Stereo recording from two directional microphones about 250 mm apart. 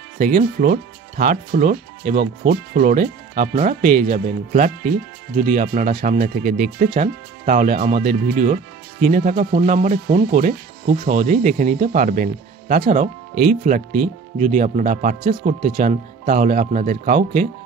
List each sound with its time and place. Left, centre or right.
0.6 s speech: right